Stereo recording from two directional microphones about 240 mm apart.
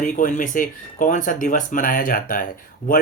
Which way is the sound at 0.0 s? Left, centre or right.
Left.